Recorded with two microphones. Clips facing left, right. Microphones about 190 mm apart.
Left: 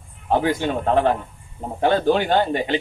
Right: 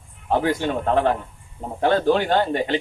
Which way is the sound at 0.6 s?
15° left (ahead or behind).